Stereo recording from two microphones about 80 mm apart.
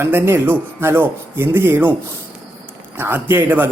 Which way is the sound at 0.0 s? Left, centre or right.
Right.